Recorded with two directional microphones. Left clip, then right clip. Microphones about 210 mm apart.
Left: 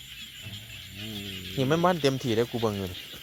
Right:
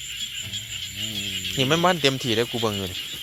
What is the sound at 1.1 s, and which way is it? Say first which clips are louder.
Speech: right 6 dB; 15° left (ahead or behind).